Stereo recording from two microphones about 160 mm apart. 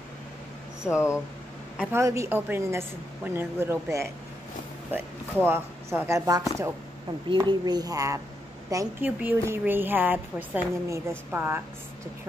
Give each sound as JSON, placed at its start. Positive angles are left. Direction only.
{"t": 0.8, "sound": "speech", "side_deg": 15}
{"t": 1.8, "sound": "a woman's voice", "side_deg": -15}